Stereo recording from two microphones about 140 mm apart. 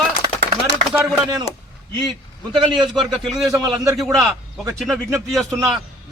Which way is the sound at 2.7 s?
Centre (ahead or behind).